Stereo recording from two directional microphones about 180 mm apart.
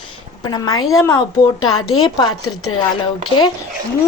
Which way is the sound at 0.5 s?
20° left (ahead or behind).